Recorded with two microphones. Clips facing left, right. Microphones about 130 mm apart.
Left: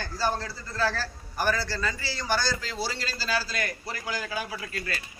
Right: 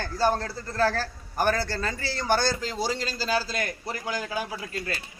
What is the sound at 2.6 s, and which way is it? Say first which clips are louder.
A man's voice: right 4 dB; 20° right (ahead or behind).